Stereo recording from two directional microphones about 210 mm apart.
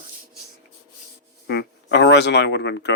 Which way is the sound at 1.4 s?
55° left (ahead or behind).